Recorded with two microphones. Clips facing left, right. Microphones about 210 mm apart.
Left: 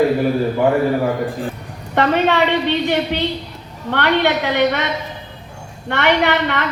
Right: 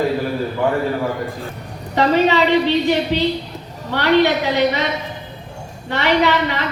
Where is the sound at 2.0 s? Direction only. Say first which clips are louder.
Right 1 dB; 60° left (ahead or behind).